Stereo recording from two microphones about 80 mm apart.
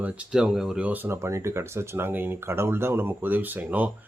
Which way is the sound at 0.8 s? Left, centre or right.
Right.